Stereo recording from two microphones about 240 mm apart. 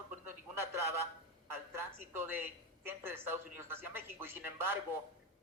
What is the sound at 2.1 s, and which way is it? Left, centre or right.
Speech, centre.